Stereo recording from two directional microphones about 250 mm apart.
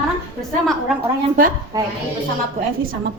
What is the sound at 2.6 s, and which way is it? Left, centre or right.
Speech, right.